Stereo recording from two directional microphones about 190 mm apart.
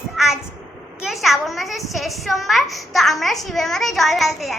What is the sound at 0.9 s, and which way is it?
A child's voice, centre (ahead or behind).